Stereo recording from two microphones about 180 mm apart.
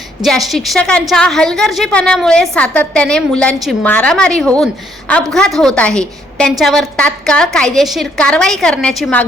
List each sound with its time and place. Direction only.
0.2 s a woman's voice: centre (ahead or behind)